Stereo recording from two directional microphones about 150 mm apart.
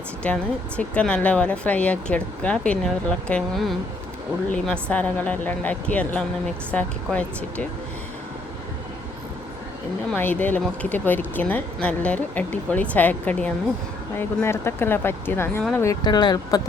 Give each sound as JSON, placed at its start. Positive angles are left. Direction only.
{"t": 0.2, "sound": "speech", "side_deg": 10}
{"t": 10.2, "sound": "speech", "side_deg": 10}
{"t": 16.0, "sound": "speech", "side_deg": 30}